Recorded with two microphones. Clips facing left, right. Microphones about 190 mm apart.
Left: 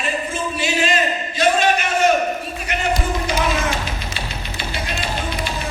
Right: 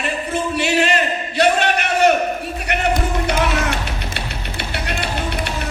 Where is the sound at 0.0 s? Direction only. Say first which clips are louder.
Right 2 dB; 65° right (ahead or behind).